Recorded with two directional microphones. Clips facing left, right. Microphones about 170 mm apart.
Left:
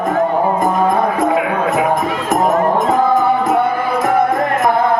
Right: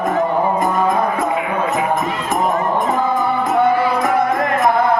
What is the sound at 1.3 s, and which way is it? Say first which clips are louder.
Music: left 3 dB; 90° left.